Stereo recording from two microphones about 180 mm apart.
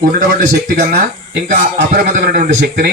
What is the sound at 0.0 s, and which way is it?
Speech, 60° right (ahead or behind).